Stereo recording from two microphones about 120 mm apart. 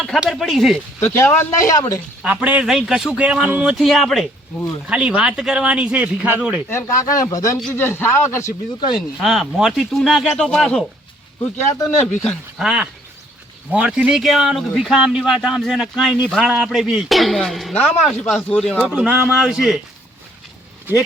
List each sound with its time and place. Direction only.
0.0 s speech: centre (ahead or behind)
1.1 s a man's voice: 20° left (ahead or behind)
2.2 s speech: 10° right (ahead or behind)
4.9 s speech: 10° right (ahead or behind)
6.7 s a man's voice: 25° left (ahead or behind)
7.6 s a man's voice: 15° left (ahead or behind)
9.0 s speech: centre (ahead or behind)
12.2 s speech: centre (ahead or behind)
18.8 s speech: 10° right (ahead or behind)